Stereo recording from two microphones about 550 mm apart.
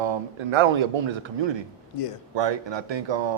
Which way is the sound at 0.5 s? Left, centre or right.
Right.